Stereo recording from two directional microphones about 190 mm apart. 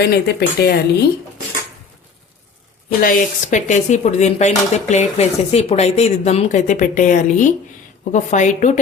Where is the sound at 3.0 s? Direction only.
45° left (ahead or behind).